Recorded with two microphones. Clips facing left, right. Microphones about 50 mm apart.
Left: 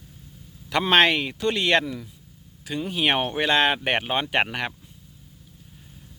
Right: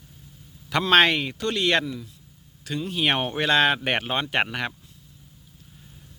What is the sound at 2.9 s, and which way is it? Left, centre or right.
Speech, centre.